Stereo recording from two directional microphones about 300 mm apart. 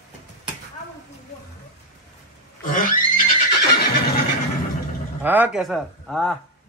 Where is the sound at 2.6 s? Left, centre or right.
Left.